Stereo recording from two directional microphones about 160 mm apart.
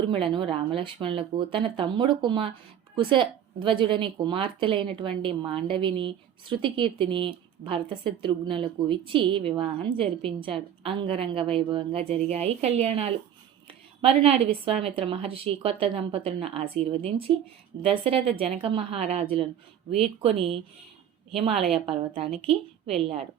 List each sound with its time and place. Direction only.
0.0 s a woman's voice: 35° right (ahead or behind)